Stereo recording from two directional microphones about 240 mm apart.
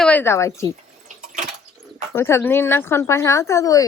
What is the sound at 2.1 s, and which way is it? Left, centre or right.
Speech, centre.